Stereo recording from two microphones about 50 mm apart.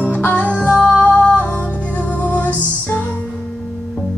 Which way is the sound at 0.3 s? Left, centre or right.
Left.